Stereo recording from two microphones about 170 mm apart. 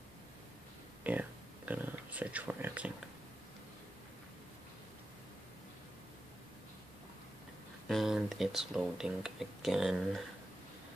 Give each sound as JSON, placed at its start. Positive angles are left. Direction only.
{"t": 1.1, "sound": "speech", "side_deg": -10}
{"t": 7.9, "sound": "speech", "side_deg": 0}